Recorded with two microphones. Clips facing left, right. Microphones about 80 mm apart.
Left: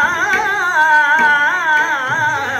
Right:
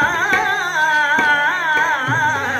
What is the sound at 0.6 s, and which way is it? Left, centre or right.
Music, left.